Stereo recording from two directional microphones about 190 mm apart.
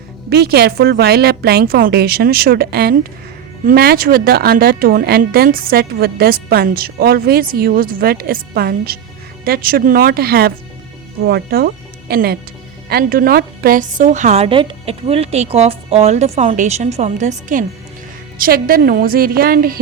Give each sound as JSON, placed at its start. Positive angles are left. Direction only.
{"t": 0.3, "sound": "a woman's voice", "side_deg": -55}